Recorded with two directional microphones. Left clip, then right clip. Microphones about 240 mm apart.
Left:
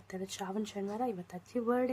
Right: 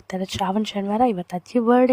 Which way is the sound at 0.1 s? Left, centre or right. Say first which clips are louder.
Right 15 dB; right.